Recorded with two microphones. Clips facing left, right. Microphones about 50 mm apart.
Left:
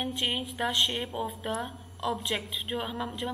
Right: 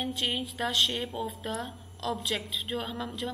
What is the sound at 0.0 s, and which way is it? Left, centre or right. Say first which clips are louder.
A woman's voice: even; centre.